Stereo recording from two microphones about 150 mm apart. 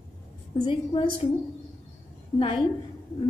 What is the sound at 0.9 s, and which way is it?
Speech, 40° left (ahead or behind).